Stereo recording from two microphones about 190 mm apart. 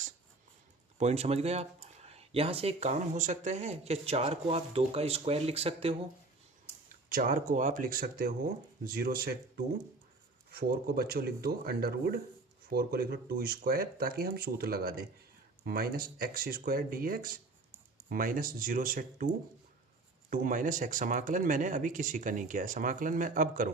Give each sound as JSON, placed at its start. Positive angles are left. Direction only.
{"t": 0.9, "sound": "speech", "side_deg": -35}
{"t": 6.8, "sound": "speech", "side_deg": -45}
{"t": 20.3, "sound": "speech", "side_deg": -45}